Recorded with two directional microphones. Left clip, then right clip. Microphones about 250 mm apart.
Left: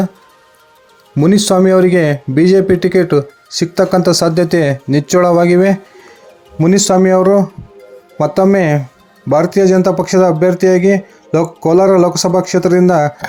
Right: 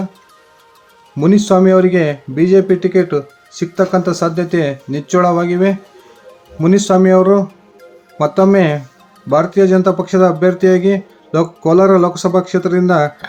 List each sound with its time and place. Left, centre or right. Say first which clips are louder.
1.1 s speech: left 1 dB; left